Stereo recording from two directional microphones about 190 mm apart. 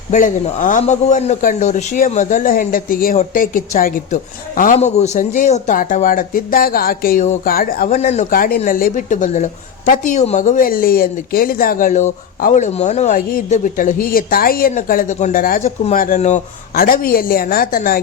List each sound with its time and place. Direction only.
0.1 s speech: 35° left (ahead or behind)
16.7 s speech: 50° left (ahead or behind)